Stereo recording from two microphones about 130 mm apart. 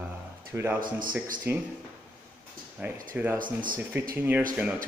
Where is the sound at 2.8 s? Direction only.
10° right (ahead or behind).